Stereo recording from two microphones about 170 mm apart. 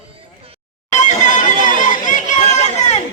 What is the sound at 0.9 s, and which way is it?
Neigh, 45° left (ahead or behind).